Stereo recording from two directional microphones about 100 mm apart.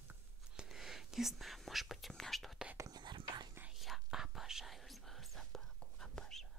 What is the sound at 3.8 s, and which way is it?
Whispering, 5° right (ahead or behind).